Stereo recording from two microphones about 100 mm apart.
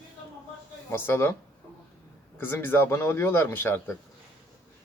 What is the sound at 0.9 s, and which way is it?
Speech, 25° left (ahead or behind).